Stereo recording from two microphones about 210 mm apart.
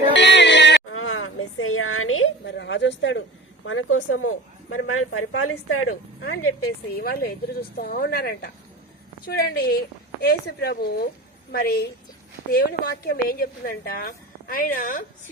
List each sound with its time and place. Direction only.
0.1 s a sound: 55° left (ahead or behind)
3.7 s a woman's voice: 70° left (ahead or behind); by 5.8 s 90° left
5.9 s a woman's voice: 55° left (ahead or behind)